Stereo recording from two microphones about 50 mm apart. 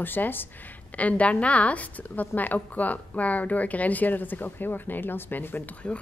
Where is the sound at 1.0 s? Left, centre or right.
Left.